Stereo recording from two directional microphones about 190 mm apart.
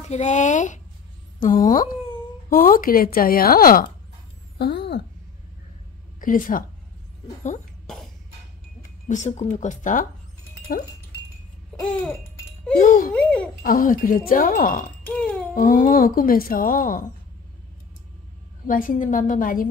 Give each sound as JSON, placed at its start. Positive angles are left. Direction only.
{"t": 0.0, "sound": "speech", "side_deg": 35}
{"t": 4.6, "sound": "a sound", "side_deg": 60}
{"t": 6.2, "sound": "speech", "side_deg": 45}
{"t": 9.0, "sound": "speech", "side_deg": 40}
{"t": 11.8, "sound": "a sound", "side_deg": 5}
{"t": 12.7, "sound": "speech", "side_deg": 45}
{"t": 13.1, "sound": "speech", "side_deg": 5}
{"t": 13.6, "sound": "speech", "side_deg": 45}
{"t": 18.7, "sound": "speech", "side_deg": 45}